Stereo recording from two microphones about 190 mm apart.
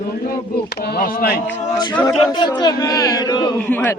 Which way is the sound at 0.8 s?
50° left (ahead or behind).